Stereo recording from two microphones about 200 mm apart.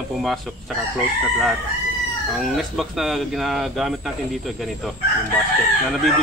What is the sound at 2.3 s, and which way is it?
Speech, centre (ahead or behind).